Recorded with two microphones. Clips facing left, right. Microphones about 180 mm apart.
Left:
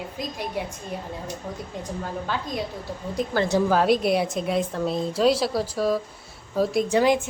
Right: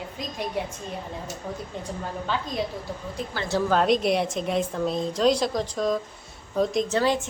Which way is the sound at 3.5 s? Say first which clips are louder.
Even; 10° left (ahead or behind).